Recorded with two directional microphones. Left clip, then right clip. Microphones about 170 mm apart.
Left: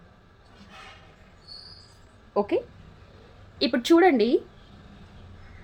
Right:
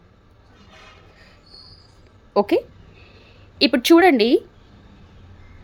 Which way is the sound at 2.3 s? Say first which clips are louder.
Right 7 dB; 55° right (ahead or behind).